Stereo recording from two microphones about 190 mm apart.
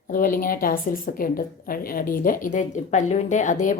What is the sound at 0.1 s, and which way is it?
A woman's voice, 45° left (ahead or behind).